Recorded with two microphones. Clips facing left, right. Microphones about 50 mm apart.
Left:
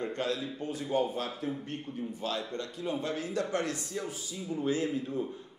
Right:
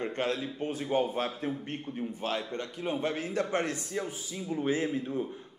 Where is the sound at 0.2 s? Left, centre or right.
Right.